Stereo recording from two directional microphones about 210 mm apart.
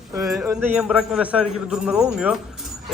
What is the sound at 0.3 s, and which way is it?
Speech, 5° right (ahead or behind).